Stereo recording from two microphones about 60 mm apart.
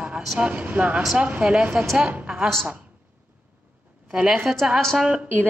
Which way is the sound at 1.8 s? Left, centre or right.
Centre.